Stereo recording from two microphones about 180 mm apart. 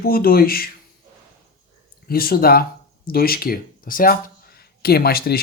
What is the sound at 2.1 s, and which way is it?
Speech, 55° left (ahead or behind).